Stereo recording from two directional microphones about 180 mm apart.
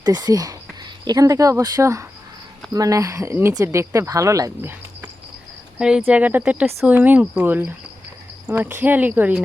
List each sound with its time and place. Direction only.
0.0 s speech: 20° right (ahead or behind)
5.8 s speech: 5° right (ahead or behind)